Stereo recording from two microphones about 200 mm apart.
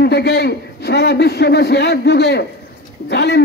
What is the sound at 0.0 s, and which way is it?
A man's voice, 55° left (ahead or behind).